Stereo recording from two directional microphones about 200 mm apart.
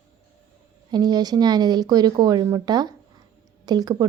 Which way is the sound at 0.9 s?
20° right (ahead or behind).